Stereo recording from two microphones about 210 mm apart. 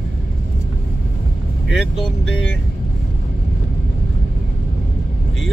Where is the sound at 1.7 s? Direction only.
Centre (ahead or behind).